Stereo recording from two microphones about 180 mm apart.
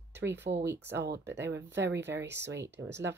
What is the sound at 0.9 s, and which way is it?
Speech, 70° right (ahead or behind).